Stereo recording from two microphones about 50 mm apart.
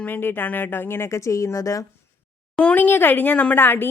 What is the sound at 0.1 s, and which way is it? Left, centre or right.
Speech, left.